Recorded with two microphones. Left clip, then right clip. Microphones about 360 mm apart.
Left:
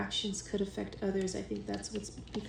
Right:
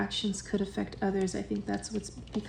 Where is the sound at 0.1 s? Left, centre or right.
Right.